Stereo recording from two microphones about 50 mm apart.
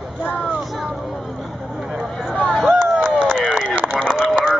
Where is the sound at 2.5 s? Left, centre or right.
Centre.